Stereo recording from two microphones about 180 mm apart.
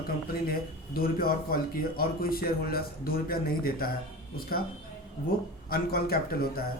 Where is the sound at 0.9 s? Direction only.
55° left (ahead or behind).